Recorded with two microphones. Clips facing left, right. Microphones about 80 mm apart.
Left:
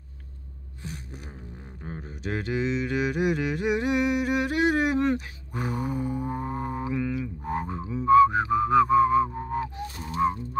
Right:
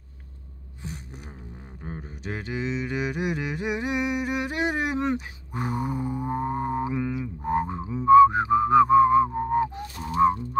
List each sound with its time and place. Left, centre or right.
1.8 s mantra: centre
5.1 s dog: right
5.8 s didgeridoo: centre
7.8 s music: right
9.8 s music: right